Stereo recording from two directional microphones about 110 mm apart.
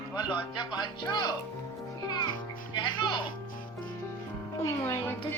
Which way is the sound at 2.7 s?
45° left (ahead or behind).